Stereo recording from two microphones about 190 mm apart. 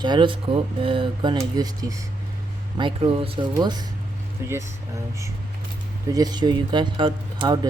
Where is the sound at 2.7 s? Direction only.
25° right (ahead or behind).